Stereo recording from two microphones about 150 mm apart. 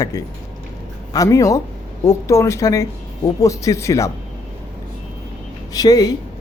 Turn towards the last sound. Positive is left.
turn(degrees=25)  # may be behind; listen again after turning